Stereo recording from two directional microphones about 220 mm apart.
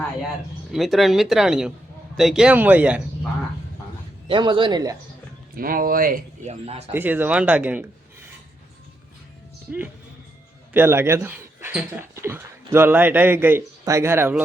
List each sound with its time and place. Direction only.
0.7 s speech: centre (ahead or behind)
4.3 s speech: 20° right (ahead or behind)
5.5 s speech: 40° right (ahead or behind)
6.9 s speech: 10° right (ahead or behind)
9.7 s speech: 5° right (ahead or behind)